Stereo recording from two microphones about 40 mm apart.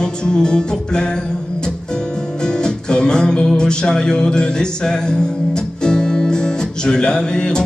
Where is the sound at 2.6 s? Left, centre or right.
Left.